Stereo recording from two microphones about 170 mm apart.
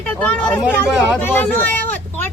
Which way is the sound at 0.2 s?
10° left (ahead or behind).